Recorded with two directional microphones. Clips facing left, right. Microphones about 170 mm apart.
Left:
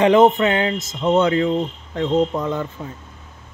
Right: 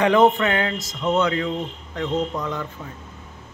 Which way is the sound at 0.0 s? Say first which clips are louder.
Left 3 dB; 20° left (ahead or behind).